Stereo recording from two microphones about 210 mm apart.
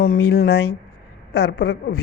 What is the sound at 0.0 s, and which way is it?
Speech, 45° left (ahead or behind).